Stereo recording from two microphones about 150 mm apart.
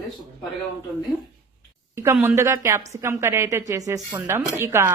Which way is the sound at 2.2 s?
15° right (ahead or behind).